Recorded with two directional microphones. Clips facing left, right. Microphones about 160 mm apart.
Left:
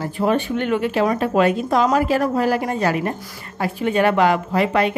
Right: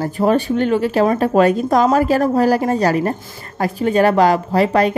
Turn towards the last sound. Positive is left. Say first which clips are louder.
# right 4 dB
turn(degrees=-40)  # may be behind; listen again after turning